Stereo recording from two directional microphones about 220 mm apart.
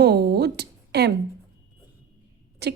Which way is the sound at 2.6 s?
50° right (ahead or behind).